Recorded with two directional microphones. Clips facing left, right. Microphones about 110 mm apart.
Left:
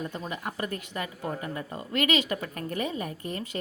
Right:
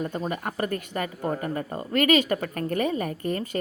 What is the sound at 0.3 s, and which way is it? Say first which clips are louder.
Speech: right 5 dB; 45° right (ahead or behind).